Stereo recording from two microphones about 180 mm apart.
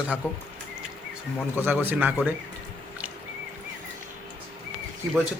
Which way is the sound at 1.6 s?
10° right (ahead or behind).